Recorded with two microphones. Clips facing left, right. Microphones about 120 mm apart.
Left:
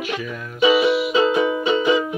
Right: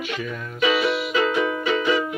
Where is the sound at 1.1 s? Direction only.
20° left (ahead or behind).